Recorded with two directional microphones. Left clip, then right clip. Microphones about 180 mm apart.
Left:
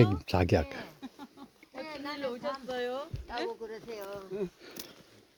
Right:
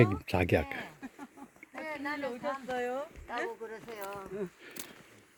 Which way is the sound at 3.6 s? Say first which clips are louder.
Left 2 dB; 5° right (ahead or behind).